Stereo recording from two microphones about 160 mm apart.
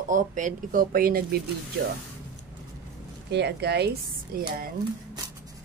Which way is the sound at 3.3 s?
90° right.